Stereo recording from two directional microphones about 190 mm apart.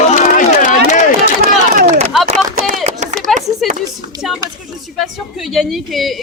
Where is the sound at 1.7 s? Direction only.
45° right (ahead or behind).